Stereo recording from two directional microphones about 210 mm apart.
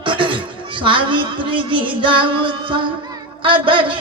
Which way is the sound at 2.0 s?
25° right (ahead or behind).